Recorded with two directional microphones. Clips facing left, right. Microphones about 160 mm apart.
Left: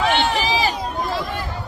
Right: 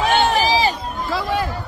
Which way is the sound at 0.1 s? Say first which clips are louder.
Right 3 dB; 45° right (ahead or behind).